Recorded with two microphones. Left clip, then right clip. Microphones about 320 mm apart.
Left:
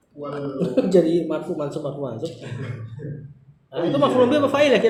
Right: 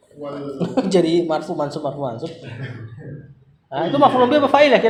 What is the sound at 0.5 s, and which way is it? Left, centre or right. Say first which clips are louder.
A man's voice: even; centre.